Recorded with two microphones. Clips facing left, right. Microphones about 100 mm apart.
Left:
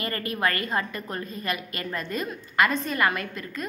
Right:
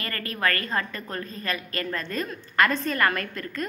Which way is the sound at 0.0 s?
20° left (ahead or behind).